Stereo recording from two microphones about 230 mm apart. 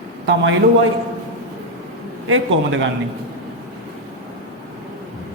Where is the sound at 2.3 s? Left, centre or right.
Right.